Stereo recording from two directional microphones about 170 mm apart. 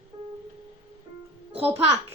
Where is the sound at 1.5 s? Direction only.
35° right (ahead or behind).